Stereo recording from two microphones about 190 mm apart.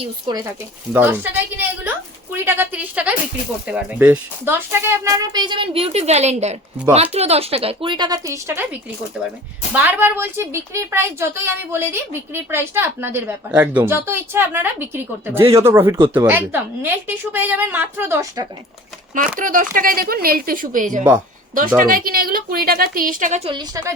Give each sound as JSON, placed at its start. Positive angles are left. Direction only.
{"t": 0.0, "sound": "speech", "side_deg": -20}
{"t": 0.9, "sound": "a woman's voice", "side_deg": -10}
{"t": 9.7, "sound": "a woman's voice", "side_deg": -10}
{"t": 19.4, "sound": "a woman's voice", "side_deg": -45}